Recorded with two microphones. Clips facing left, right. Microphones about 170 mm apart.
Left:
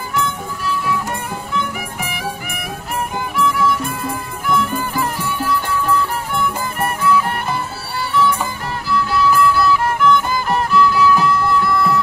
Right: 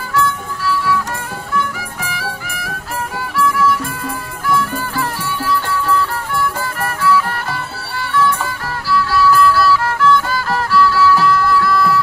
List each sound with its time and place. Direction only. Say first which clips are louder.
0.1 s music: right 4 dB; 20° left (ahead or behind)
8.9 s music: right 2 dB; 20° left (ahead or behind)